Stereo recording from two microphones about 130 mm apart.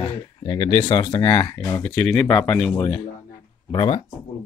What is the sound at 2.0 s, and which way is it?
Speech, 10° left (ahead or behind).